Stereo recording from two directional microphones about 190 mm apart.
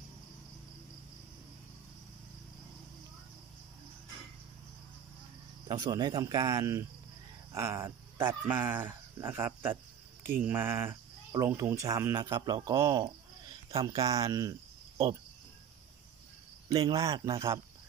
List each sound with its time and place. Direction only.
5.7 s speech: 20° right (ahead or behind)
16.6 s cricket: 20° right (ahead or behind)